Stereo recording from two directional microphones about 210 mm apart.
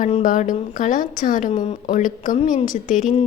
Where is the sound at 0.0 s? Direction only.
40° left (ahead or behind).